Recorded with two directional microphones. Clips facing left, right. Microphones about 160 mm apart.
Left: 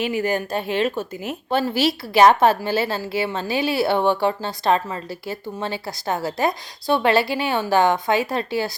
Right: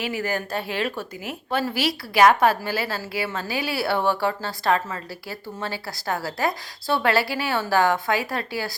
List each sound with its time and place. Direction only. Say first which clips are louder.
0.0 s a woman's voice: left 5 dB; 20° left (ahead or behind)